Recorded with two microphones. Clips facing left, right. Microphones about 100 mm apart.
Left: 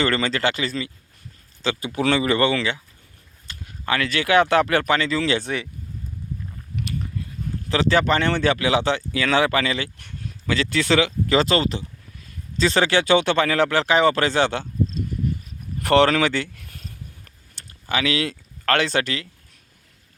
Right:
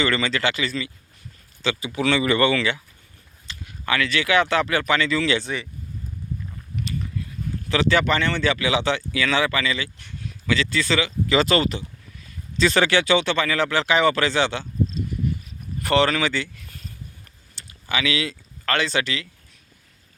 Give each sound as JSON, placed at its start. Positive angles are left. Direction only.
{"t": 0.0, "sound": "speech", "side_deg": 40}
{"t": 3.4, "sound": "speech", "side_deg": 40}
{"t": 4.9, "sound": "speech", "side_deg": 40}
{"t": 5.4, "sound": "speech", "side_deg": 65}
{"t": 7.7, "sound": "speech", "side_deg": 35}
{"t": 8.2, "sound": "speech", "side_deg": 50}
{"t": 10.7, "sound": "speech", "side_deg": 65}
{"t": 11.3, "sound": "speech", "side_deg": 30}
{"t": 15.8, "sound": "speech", "side_deg": 65}